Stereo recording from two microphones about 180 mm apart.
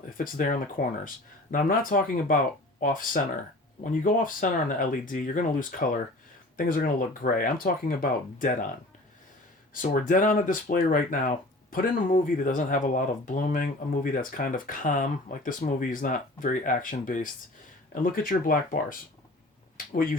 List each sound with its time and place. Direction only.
0.2 s speech: 45° left (ahead or behind)
9.7 s speech: 45° left (ahead or behind)